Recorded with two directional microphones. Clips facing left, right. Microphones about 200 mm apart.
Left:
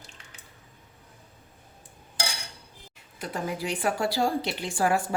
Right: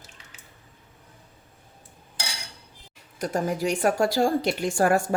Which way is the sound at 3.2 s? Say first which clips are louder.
Right 6 dB; 45° right (ahead or behind).